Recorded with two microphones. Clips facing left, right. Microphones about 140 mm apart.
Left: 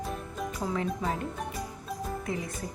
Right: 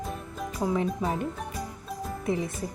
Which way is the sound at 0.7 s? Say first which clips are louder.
Right 1 dB; 20° right (ahead or behind).